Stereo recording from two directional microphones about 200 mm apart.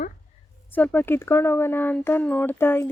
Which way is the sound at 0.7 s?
10° left (ahead or behind).